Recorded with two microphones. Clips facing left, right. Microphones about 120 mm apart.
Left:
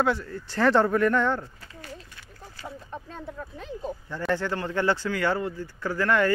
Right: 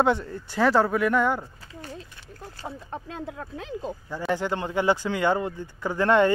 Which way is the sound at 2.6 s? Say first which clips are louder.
Right 3 dB; 40° right (ahead or behind).